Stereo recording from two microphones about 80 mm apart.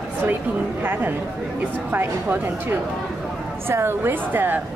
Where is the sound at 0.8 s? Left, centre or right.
Right.